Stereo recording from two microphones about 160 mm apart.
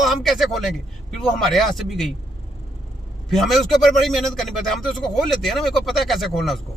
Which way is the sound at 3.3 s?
Centre (ahead or behind).